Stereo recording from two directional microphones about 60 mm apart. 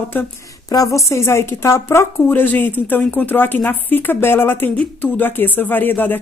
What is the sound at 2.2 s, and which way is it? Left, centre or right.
A woman's voice, left.